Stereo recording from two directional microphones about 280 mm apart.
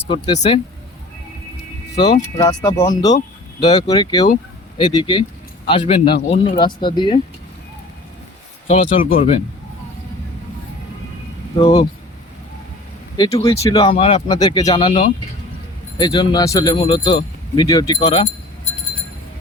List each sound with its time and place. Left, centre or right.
0.0 s speech: centre
2.4 s speech: centre
8.6 s speech: left
11.5 s speech: centre
13.1 s speech: centre